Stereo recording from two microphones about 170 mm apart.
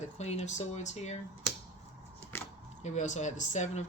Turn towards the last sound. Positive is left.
turn(degrees=45)  # may be behind; listen again after turning